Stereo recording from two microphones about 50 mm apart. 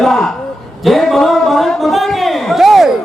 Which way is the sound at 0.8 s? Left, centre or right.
Centre.